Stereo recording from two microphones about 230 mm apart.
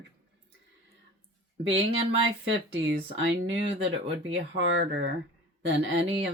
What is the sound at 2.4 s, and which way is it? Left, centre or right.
Speech, right.